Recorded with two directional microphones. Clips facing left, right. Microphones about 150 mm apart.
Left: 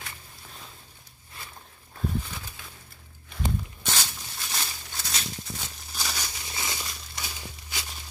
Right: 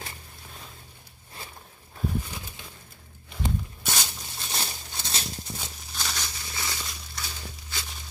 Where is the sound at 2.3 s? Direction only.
20° right (ahead or behind).